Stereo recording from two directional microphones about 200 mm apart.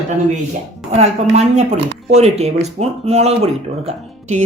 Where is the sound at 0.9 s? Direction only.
35° right (ahead or behind).